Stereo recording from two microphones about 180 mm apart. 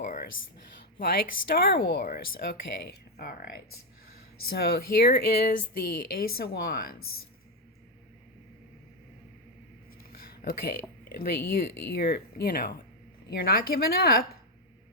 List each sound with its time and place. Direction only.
0.0 s speech: 50° left (ahead or behind)
4.4 s speech: 60° left (ahead or behind)
10.0 s a sound: 55° left (ahead or behind)
11.9 s speech: 60° left (ahead or behind)